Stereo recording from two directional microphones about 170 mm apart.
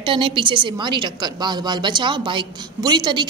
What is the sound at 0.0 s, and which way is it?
A woman's voice, 30° right (ahead or behind).